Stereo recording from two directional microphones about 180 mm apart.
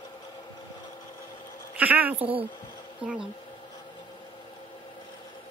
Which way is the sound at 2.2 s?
30° right (ahead or behind).